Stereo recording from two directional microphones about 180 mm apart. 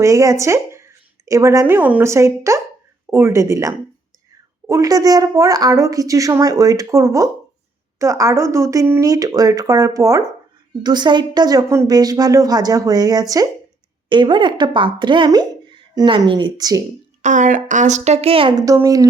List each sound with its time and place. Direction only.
0.0 s a woman's voice: 15° right (ahead or behind)
17.2 s a woman's voice: 45° right (ahead or behind)
18.6 s speech: 20° right (ahead or behind)